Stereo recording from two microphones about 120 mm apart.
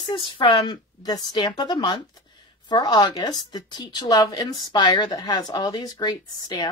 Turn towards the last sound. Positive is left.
turn(degrees=35)  # may be behind; listen again after turning